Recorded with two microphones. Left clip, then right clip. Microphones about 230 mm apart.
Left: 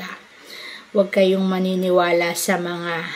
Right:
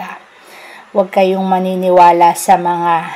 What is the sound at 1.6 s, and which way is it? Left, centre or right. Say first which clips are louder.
Speech: right 6 dB; right.